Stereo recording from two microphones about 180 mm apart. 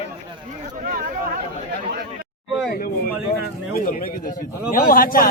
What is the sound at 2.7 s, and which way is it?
A man's voice, 55° left (ahead or behind).